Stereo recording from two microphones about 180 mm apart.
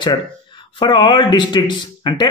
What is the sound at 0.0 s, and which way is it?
A man's voice, 25° left (ahead or behind).